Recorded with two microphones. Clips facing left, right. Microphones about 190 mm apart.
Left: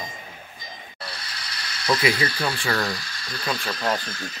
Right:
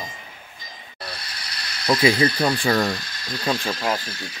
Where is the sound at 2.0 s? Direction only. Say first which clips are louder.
Right 5 dB; 35° right (ahead or behind).